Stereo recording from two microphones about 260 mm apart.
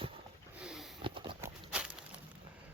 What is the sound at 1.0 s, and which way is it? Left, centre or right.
Horse, centre.